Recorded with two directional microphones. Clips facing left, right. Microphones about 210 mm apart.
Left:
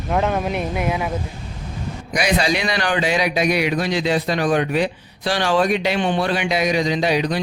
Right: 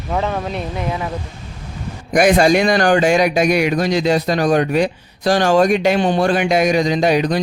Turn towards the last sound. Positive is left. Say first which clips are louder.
# right 4 dB
turn(degrees=-45)  # may be behind; listen again after turning